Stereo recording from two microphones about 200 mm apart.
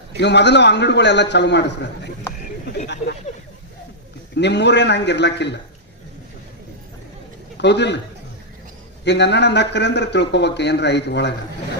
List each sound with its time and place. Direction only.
0.2 s a man's voice: 60° left (ahead or behind)
4.4 s a man's voice: 60° left (ahead or behind)
7.6 s a man's voice: 60° left (ahead or behind)
9.0 s a man's voice: 60° left (ahead or behind)